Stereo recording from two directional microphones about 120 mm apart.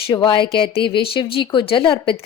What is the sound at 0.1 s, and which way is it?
Speech, 40° left (ahead or behind).